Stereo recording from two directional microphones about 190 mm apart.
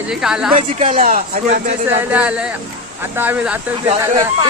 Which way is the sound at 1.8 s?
10° right (ahead or behind).